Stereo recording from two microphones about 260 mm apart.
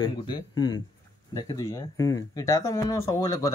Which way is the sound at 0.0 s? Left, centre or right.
Centre.